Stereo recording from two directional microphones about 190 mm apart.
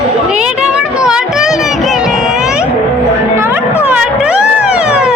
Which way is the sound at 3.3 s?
15° right (ahead or behind).